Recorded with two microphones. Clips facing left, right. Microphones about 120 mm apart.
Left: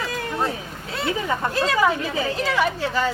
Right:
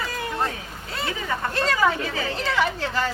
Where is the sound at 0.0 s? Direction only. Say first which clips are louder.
Left 2 dB; centre (ahead or behind).